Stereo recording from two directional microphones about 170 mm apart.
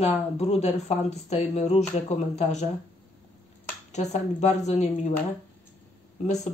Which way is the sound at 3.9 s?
40° left (ahead or behind).